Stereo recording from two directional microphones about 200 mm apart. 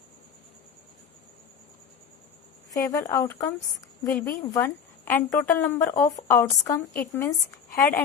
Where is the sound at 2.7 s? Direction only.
15° left (ahead or behind).